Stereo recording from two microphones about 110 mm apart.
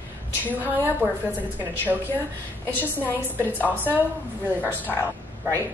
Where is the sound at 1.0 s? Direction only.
15° right (ahead or behind).